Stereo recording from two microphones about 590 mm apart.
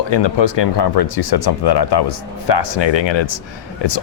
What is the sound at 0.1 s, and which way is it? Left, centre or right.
Speech, left.